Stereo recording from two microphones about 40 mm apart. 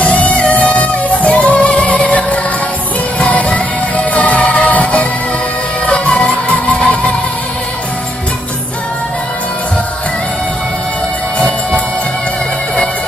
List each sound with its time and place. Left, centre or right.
0.0 s music: left